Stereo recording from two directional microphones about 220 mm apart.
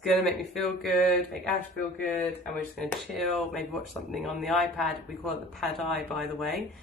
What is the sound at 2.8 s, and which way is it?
Speech, centre (ahead or behind).